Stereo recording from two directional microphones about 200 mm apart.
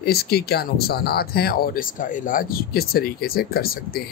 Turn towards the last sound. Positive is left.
turn(degrees=50)  # may be behind; listen again after turning